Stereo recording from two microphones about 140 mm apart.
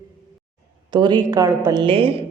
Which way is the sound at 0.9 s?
35° right (ahead or behind).